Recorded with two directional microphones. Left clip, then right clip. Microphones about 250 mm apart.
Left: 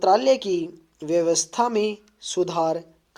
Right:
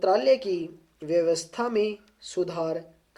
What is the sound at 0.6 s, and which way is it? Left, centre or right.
Speech, left.